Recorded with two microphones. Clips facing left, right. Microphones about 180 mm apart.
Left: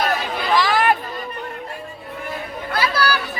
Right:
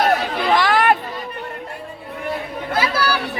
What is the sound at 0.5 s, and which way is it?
Chatter, 55° right (ahead or behind).